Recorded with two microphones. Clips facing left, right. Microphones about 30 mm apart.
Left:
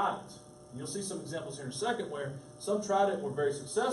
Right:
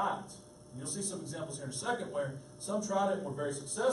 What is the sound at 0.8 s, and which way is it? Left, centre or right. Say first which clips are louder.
A man's voice: left 2 dB; centre.